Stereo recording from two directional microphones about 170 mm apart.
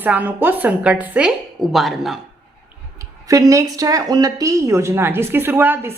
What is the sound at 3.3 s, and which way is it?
A woman's voice, 20° right (ahead or behind).